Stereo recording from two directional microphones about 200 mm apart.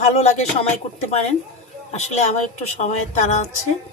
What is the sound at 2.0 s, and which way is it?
Speech, 35° left (ahead or behind).